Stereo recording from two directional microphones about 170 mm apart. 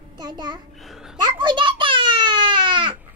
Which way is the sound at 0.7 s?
Centre (ahead or behind).